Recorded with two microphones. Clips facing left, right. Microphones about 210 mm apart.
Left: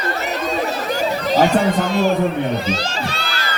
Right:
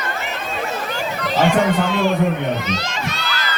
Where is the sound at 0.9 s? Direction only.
40° left (ahead or behind).